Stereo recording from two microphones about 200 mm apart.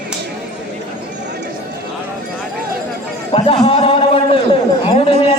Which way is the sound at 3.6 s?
30° left (ahead or behind).